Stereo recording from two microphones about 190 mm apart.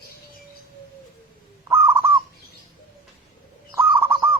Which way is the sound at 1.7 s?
15° right (ahead or behind).